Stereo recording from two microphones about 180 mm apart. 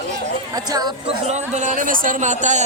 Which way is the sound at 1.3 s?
40° right (ahead or behind).